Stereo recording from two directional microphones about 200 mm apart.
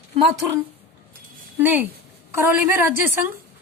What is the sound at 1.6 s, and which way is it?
A woman's voice, 10° right (ahead or behind).